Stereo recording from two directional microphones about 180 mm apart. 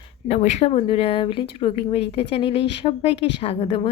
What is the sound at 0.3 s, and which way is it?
A woman's voice, 40° left (ahead or behind).